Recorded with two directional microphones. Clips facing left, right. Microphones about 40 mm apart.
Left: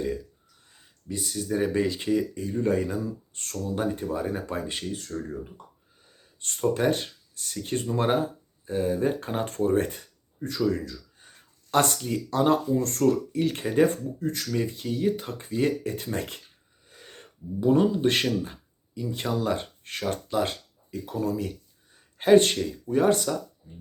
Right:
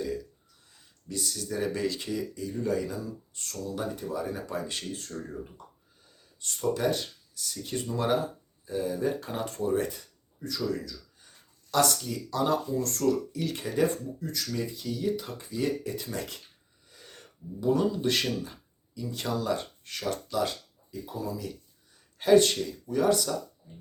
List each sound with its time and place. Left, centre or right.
0.7 s speech: left
4.7 s speech: left
6.4 s speech: left
20.9 s speech: left
22.2 s speech: left